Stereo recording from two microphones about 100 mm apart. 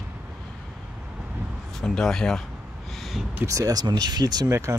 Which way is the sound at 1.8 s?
5° left (ahead or behind).